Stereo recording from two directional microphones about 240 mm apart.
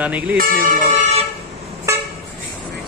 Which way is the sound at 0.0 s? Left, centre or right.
Centre.